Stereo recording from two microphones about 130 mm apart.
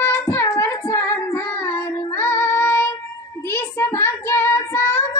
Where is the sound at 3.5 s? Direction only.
15° left (ahead or behind).